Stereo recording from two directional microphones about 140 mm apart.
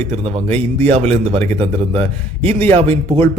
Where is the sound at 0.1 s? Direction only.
45° right (ahead or behind).